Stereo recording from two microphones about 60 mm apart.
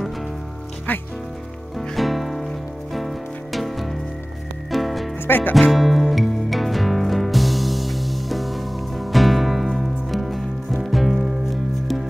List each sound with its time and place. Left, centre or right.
1.8 s music: centre
5.2 s music: left
5.5 s music: centre